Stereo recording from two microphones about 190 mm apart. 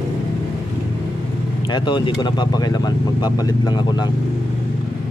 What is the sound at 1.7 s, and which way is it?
Speech, 25° left (ahead or behind).